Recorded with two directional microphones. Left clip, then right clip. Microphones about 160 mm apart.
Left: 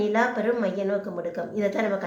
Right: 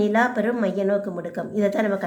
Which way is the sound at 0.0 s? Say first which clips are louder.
Right 3 dB; 30° right (ahead or behind).